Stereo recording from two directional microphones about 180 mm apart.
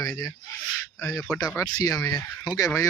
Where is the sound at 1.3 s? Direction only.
Centre (ahead or behind).